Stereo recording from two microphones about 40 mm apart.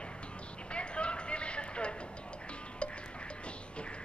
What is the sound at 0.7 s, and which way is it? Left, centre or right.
Clip-clop, left.